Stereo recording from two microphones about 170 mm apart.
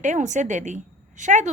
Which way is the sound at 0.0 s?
45° right (ahead or behind).